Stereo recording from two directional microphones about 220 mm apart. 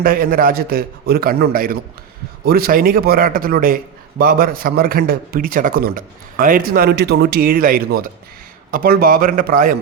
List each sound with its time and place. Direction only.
0.0 s a man's voice: 40° right (ahead or behind)